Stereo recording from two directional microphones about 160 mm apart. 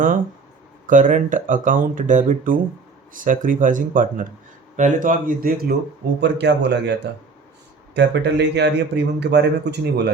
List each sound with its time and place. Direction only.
0.9 s speech: 55° right (ahead or behind)
6.1 s speech: 90° right
7.9 s speech: 90° right